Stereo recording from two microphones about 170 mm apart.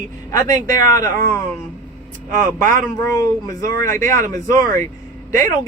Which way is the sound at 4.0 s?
50° right (ahead or behind).